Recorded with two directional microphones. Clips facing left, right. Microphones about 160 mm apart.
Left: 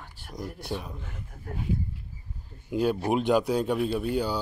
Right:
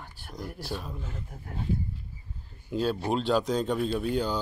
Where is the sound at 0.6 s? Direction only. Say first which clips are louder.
Left 2 dB; 20° left (ahead or behind).